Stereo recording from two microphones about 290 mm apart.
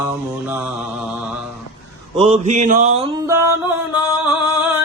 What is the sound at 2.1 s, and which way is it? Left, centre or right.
Mantra, right.